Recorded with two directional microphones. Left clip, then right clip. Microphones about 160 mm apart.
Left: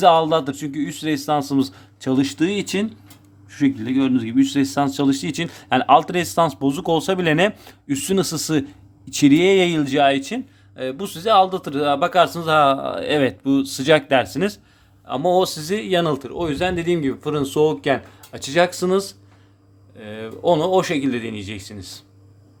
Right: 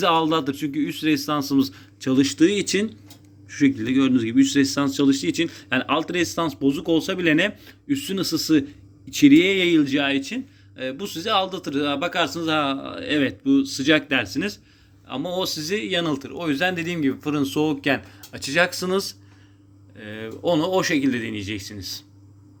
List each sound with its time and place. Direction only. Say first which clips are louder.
0.0 s speech: left 5 dB; 25° left (ahead or behind)
16.4 s speech: even; 10° left (ahead or behind)